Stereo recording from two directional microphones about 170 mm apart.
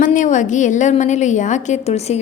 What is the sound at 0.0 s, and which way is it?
A woman's voice, 50° left (ahead or behind).